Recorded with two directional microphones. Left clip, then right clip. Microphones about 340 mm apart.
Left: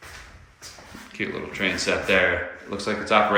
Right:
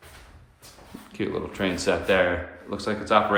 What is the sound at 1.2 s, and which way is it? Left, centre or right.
Speech, centre.